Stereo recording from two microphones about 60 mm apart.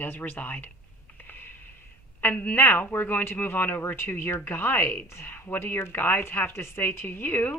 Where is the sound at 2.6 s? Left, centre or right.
Left.